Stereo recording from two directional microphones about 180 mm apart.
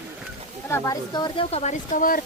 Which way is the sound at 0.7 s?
20° left (ahead or behind).